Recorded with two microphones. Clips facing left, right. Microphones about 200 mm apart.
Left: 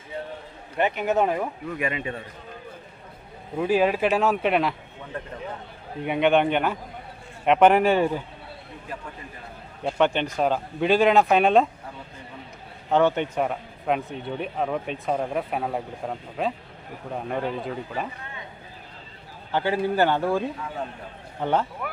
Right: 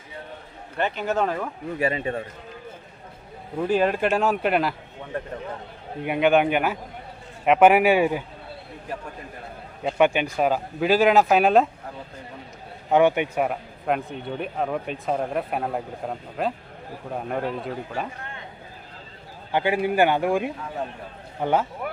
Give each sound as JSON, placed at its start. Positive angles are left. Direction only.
{"t": 0.8, "sound": "speech", "side_deg": 15}
{"t": 1.8, "sound": "a man's voice", "side_deg": -35}
{"t": 3.6, "sound": "speech", "side_deg": 5}
{"t": 6.1, "sound": "a man's voice", "side_deg": -5}
{"t": 10.0, "sound": "speech", "side_deg": -10}
{"t": 12.9, "sound": "speech", "side_deg": -15}
{"t": 19.5, "sound": "a man's voice", "side_deg": -15}